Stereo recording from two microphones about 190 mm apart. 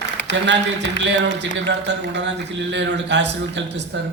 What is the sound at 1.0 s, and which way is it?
Speech, 70° right (ahead or behind).